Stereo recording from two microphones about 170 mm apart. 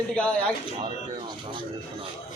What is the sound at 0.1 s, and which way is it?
Speech, 5° left (ahead or behind).